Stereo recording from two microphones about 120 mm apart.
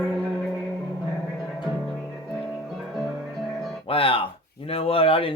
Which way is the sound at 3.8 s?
50° left (ahead or behind).